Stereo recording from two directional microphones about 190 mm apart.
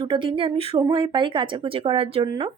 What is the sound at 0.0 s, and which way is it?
Speech, 25° right (ahead or behind).